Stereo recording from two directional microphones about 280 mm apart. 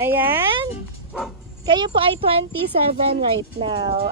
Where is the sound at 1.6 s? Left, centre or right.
Centre.